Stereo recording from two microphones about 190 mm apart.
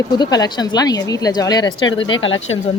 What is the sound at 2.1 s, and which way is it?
Speech, 90° left.